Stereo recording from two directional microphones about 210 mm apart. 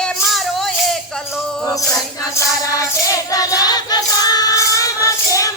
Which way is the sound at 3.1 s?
15° left (ahead or behind).